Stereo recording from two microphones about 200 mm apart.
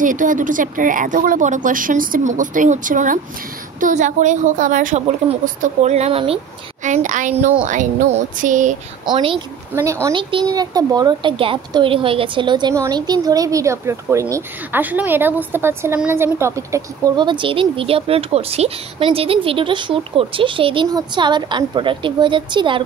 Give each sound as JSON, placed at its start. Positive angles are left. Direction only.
{"t": 0.0, "sound": "a woman's voice", "side_deg": -40}
{"t": 9.0, "sound": "speech", "side_deg": -25}
{"t": 9.8, "sound": "speech", "side_deg": -15}